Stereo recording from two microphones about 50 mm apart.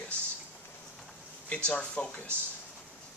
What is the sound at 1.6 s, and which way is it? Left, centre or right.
Speech, left.